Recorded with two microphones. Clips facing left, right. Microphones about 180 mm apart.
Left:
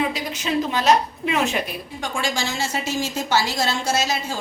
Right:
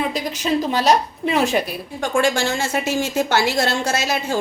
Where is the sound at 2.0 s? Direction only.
55° right (ahead or behind).